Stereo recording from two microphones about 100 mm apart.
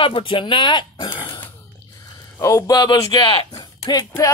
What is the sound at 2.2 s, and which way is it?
Speech, 30° left (ahead or behind).